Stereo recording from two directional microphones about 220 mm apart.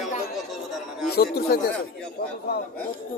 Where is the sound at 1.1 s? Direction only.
45° left (ahead or behind).